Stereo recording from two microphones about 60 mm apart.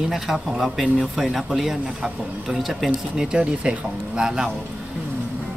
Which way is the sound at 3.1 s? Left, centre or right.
Centre.